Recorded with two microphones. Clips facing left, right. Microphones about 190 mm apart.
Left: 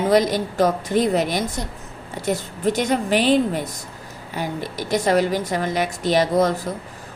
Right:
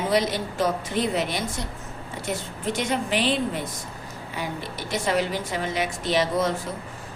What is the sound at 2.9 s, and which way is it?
A woman's voice, 45° left (ahead or behind).